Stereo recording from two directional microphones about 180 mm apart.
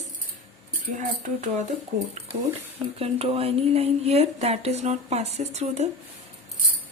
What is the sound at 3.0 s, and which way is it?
Speech, 35° right (ahead or behind).